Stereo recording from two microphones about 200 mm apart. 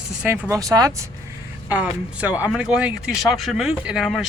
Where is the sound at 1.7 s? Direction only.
5° right (ahead or behind).